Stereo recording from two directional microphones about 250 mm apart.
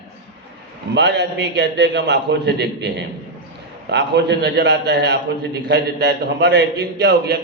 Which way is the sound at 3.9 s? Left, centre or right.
Right.